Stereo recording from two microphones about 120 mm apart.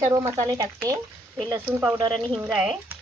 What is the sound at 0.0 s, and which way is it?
Speech, 25° right (ahead or behind).